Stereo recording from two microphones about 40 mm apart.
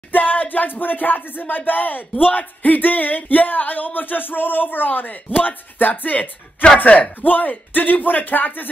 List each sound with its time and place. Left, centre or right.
0.1 s music: left
1.7 s speech: left